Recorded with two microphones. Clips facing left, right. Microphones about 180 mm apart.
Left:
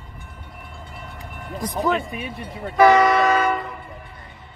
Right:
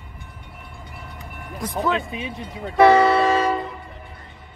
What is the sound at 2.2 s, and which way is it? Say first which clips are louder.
Speech: even; 20° right (ahead or behind).